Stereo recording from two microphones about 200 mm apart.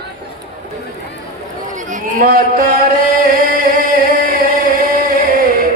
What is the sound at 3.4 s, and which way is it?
Chant, 45° right (ahead or behind).